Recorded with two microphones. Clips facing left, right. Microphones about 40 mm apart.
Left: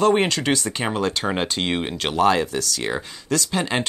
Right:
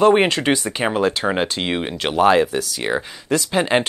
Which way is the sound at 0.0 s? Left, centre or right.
Centre.